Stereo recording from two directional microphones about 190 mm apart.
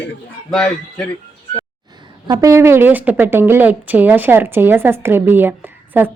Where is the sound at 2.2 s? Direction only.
15° right (ahead or behind).